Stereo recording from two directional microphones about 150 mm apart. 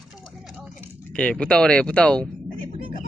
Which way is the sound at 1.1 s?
5° left (ahead or behind).